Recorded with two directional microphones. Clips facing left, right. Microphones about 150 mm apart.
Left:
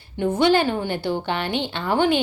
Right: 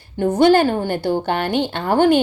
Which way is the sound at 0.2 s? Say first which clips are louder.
Right 5 dB; 40° right (ahead or behind).